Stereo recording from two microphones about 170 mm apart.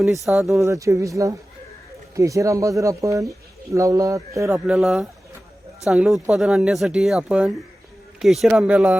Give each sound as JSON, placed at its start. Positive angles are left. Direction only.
{"t": 0.3, "sound": "speech", "side_deg": 0}
{"t": 0.6, "sound": "speech", "side_deg": -20}